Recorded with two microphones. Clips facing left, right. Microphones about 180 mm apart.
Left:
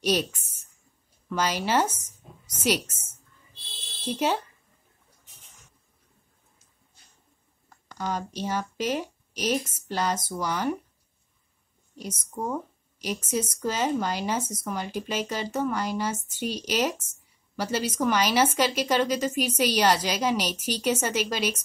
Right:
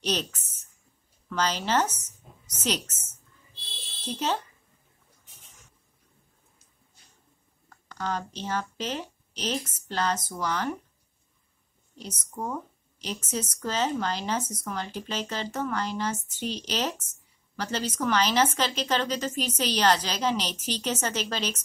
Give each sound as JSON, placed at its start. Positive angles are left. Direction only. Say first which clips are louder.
{"t": 0.0, "sound": "a woman's voice", "louder": "left 4 dB", "side_deg": 10}
{"t": 1.3, "sound": "speech", "louder": "left 1 dB", "side_deg": 10}
{"t": 4.0, "sound": "speech", "louder": "left 3 dB", "side_deg": 10}
{"t": 7.7, "sound": "speech", "louder": "left 1 dB", "side_deg": 10}
{"t": 12.0, "sound": "speech", "louder": "left 3 dB", "side_deg": 10}